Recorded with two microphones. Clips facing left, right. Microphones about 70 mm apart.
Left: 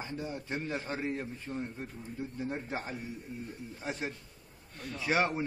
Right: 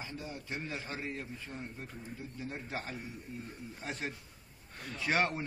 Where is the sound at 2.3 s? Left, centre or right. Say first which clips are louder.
Left 4 dB; left.